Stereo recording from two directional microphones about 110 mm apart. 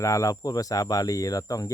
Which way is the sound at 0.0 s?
30° left (ahead or behind).